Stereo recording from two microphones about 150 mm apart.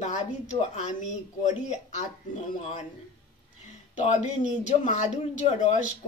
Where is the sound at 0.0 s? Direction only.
50° left (ahead or behind).